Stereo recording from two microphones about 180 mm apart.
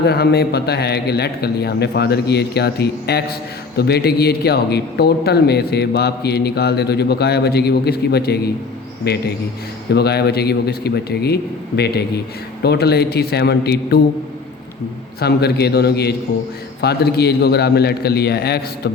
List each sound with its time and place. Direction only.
0.0 s speech: 65° left (ahead or behind)
15.2 s speech: 65° left (ahead or behind)